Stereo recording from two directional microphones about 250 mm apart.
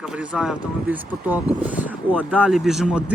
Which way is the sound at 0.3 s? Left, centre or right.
Centre.